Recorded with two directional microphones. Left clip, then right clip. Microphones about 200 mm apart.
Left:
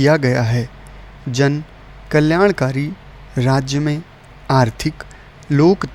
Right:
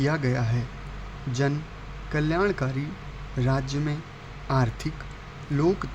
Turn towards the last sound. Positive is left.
turn(degrees=45)  # may be behind; listen again after turning